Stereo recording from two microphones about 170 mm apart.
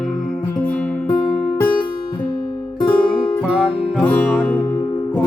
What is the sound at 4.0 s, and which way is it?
Music, 5° left (ahead or behind).